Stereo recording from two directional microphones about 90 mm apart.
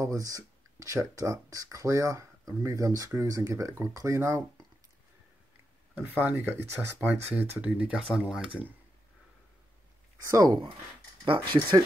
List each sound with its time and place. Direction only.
0.0 s speech: 40° right (ahead or behind)
6.2 s speech: 25° right (ahead or behind)
10.2 s speech: 45° right (ahead or behind)
11.2 s speech: 65° right (ahead or behind)